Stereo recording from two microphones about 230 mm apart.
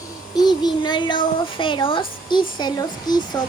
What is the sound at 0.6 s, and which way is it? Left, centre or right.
A child's voice, centre.